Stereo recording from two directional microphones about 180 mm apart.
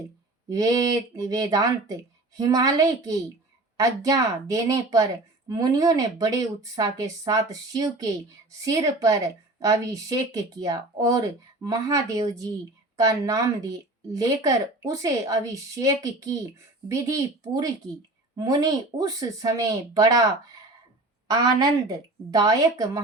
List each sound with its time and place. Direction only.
0.4 s a woman's voice: 20° right (ahead or behind)
21.2 s a woman's voice: 20° right (ahead or behind)